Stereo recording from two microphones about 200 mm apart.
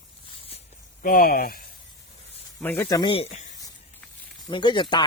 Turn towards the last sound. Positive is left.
turn(degrees=25)  # may be behind; listen again after turning